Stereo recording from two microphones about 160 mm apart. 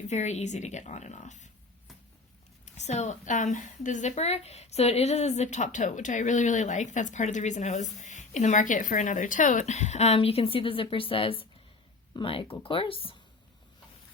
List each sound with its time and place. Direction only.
0.1 s a woman's voice: 45° left (ahead or behind)
2.6 s a woman's voice: 45° left (ahead or behind)